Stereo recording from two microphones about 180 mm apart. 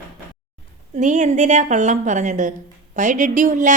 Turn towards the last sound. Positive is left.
turn(degrees=-45)  # may be behind; listen again after turning